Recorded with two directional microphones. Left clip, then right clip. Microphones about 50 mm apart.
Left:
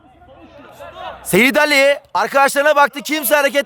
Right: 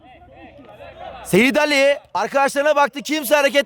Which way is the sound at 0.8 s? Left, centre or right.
Right.